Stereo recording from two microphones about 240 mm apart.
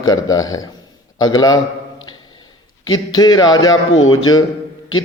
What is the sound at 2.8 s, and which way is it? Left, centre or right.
Speech, centre.